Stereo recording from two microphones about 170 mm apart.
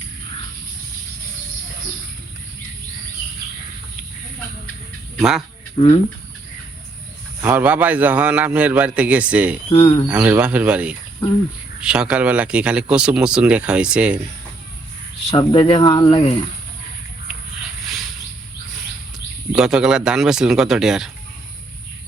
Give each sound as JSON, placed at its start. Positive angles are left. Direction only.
{"t": 5.1, "sound": "a man's voice", "side_deg": 0}
{"t": 5.7, "sound": "speech", "side_deg": 35}
{"t": 7.4, "sound": "a man's voice", "side_deg": -10}
{"t": 9.7, "sound": "speech", "side_deg": 30}
{"t": 10.1, "sound": "a man's voice", "side_deg": -10}
{"t": 15.3, "sound": "speech", "side_deg": 30}
{"t": 19.5, "sound": "speech", "side_deg": -5}